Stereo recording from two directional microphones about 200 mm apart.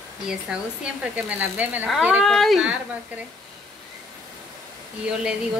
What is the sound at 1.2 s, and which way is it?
Speech, 10° right (ahead or behind).